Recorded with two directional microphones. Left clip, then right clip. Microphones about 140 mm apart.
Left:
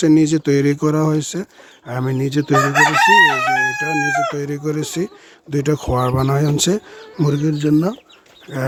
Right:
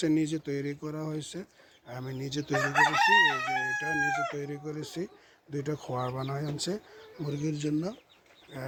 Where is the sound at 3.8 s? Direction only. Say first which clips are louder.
Left 11 dB; 20° left (ahead or behind).